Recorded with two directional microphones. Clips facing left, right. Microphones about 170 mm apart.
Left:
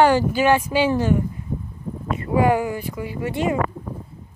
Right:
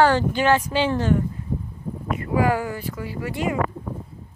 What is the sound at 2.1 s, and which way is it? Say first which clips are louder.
Speech: left 3 dB; 25° left (ahead or behind).